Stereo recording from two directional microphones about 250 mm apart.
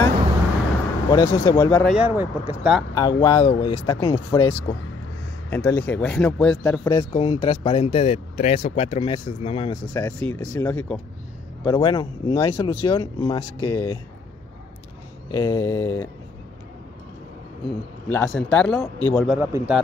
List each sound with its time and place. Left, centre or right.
1.1 s speech: centre
2.0 s a man's voice: centre
2.9 s speech: centre
5.5 s a man's voice: centre
7.0 s speech: centre
9.9 s speech: centre
15.3 s speech: centre
18.0 s a man's voice: centre